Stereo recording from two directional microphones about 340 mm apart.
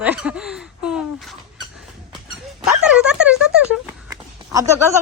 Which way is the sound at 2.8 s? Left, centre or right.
Centre.